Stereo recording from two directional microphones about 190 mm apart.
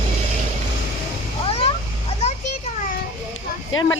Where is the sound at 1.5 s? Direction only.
30° left (ahead or behind).